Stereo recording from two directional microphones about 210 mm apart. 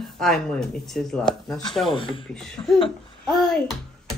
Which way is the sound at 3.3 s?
5° left (ahead or behind).